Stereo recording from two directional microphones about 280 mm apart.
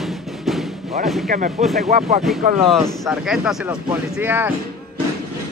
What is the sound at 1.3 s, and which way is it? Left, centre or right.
Speech, right.